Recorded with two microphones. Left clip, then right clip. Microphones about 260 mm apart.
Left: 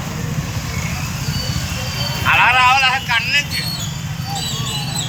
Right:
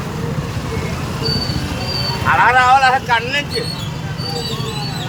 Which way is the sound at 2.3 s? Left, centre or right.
Centre.